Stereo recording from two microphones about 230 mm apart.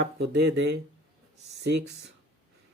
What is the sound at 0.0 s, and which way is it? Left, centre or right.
Speech, right.